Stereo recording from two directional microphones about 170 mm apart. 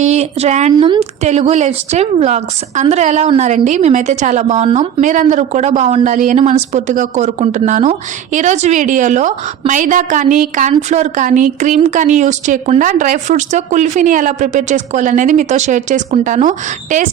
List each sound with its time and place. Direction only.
0.0 s speech: 40° right (ahead or behind)
0.8 s speech: 30° right (ahead or behind)
1.2 s a woman's voice: 40° right (ahead or behind)